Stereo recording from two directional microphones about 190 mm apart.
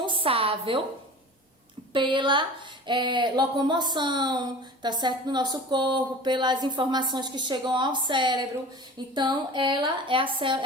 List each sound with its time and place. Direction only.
0.0 s a woman's voice: 25° right (ahead or behind)
1.9 s speech: 25° right (ahead or behind)